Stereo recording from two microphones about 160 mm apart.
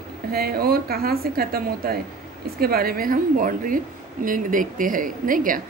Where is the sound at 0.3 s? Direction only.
70° right (ahead or behind).